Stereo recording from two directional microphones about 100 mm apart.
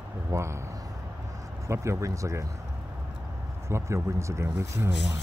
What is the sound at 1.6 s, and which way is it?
Speech, 30° right (ahead or behind).